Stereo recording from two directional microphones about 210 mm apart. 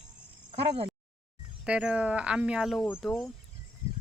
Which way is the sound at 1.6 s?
5° right (ahead or behind).